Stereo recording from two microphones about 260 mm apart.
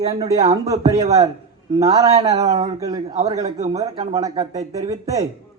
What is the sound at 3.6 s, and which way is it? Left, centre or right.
Speech, right.